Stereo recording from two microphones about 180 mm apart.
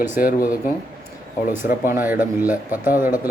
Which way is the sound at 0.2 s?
55° left (ahead or behind).